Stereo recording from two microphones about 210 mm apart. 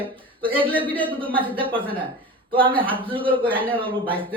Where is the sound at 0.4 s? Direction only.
25° right (ahead or behind).